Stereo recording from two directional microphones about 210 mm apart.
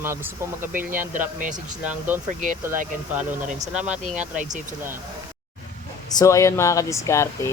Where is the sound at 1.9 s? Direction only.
10° right (ahead or behind).